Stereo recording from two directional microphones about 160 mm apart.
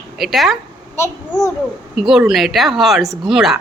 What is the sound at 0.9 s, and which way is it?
Speech, 20° left (ahead or behind).